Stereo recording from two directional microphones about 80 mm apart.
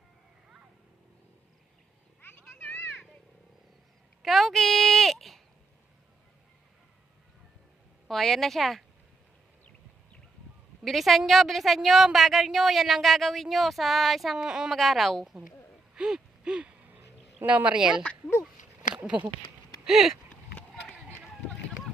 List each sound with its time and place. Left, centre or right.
2.2 s a sound: left
4.2 s a sound: centre
8.0 s speech: centre
10.8 s speech: centre
16.0 s gasp: centre
17.4 s speech: centre
19.0 s speech: centre
19.9 s speech: centre